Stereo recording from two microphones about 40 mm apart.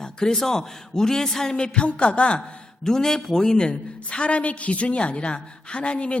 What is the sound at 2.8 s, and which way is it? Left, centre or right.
A woman's voice, centre.